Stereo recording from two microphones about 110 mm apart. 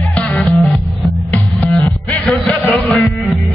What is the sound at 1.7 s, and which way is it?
Music, 10° left (ahead or behind).